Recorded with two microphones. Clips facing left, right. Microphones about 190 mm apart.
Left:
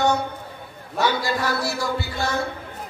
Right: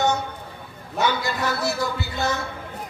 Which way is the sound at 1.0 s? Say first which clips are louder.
Left 1 dB; 20° right (ahead or behind).